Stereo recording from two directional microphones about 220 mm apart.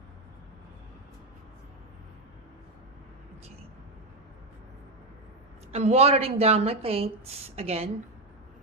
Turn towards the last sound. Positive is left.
turn(degrees=-25)  # may be behind; listen again after turning